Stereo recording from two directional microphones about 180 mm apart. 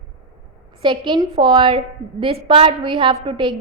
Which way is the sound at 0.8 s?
25° right (ahead or behind).